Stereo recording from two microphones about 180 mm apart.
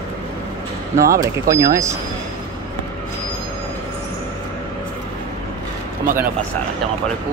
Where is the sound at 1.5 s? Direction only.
15° right (ahead or behind).